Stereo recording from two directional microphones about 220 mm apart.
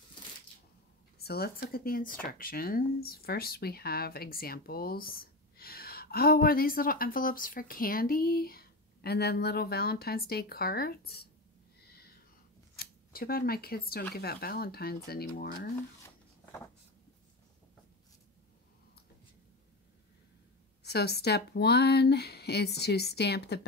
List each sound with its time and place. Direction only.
1.1 s speech: 45° left (ahead or behind)
12.7 s speech: 40° left (ahead or behind)
20.8 s speech: 45° left (ahead or behind)